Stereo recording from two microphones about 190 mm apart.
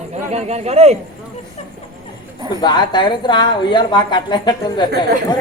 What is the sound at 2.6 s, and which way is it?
A woman's voice, 20° left (ahead or behind).